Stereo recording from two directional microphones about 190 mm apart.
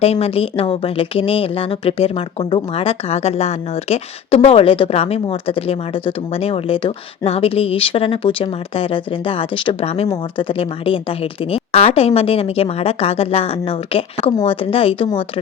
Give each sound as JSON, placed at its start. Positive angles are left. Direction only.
{"t": 0.0, "sound": "speech", "side_deg": 30}